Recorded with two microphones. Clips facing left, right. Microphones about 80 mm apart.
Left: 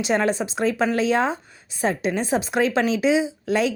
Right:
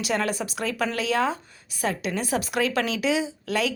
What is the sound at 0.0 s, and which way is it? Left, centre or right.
A woman's voice, left.